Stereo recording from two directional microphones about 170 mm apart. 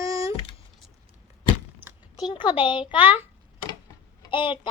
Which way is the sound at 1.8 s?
10° right (ahead or behind).